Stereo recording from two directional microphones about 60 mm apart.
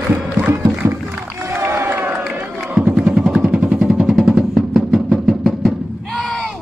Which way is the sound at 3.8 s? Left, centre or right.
Centre.